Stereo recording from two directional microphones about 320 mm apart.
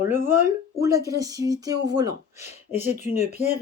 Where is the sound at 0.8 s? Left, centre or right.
Centre.